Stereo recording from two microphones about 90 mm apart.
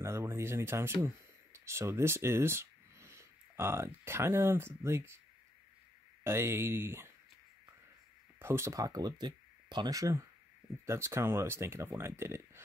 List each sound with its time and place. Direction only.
0.0 s speech: 30° right (ahead or behind)
6.2 s speech: 30° right (ahead or behind)
8.4 s speech: 30° right (ahead or behind)